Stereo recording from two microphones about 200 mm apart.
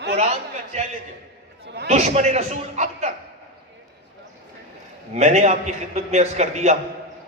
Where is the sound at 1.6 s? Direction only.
55° right (ahead or behind).